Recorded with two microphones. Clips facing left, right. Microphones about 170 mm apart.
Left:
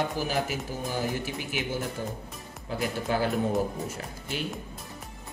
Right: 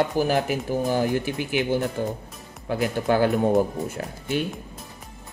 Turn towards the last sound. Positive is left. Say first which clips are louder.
# right 8 dB
turn(degrees=-60)  # may be behind; listen again after turning